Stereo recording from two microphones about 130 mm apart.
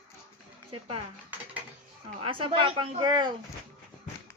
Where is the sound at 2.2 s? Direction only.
45° right (ahead or behind).